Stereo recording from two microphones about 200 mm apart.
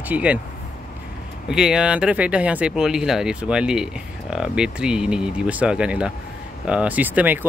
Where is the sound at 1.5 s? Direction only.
5° right (ahead or behind).